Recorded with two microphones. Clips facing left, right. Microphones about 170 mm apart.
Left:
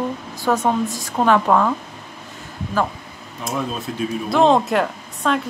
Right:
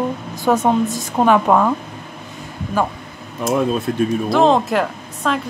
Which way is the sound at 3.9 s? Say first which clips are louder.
Right 7 dB; 55° right (ahead or behind).